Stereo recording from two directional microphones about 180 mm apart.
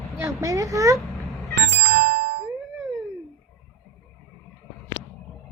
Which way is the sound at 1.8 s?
60° right (ahead or behind).